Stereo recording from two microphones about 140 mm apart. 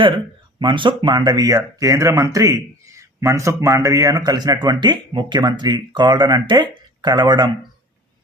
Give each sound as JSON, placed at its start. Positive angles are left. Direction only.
{"t": 0.6, "sound": "speech", "side_deg": -35}